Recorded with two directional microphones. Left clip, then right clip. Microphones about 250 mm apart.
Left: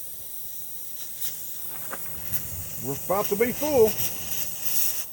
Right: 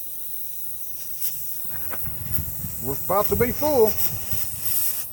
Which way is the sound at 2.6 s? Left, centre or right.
Centre.